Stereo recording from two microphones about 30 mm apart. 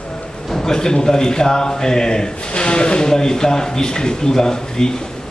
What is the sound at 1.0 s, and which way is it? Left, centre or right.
Speech, left.